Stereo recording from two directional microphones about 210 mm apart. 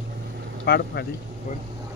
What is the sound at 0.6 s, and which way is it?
Speech, 50° left (ahead or behind).